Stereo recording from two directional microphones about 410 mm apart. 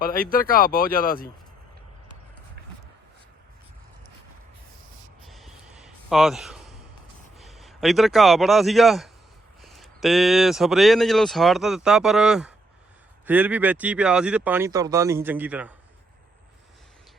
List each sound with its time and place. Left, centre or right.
0.0 s speech: left
5.2 s gasp: centre
7.3 s a man's voice: centre